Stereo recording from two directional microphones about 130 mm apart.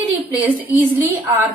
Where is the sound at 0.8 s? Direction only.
15° right (ahead or behind).